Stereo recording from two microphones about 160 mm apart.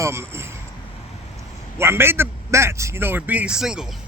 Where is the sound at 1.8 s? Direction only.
15° right (ahead or behind).